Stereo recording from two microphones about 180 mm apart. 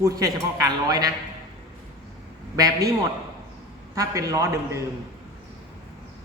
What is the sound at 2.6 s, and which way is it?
Speech, 20° right (ahead or behind).